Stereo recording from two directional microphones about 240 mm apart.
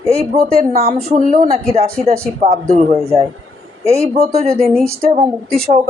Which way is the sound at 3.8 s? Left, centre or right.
Right.